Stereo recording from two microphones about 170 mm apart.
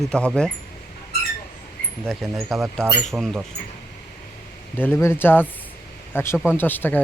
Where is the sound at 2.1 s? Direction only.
Centre (ahead or behind).